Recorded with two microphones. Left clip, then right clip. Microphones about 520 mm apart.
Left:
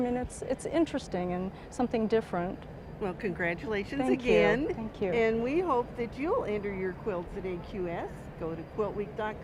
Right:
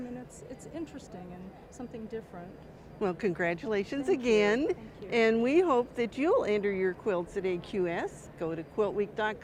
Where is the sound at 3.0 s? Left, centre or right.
Right.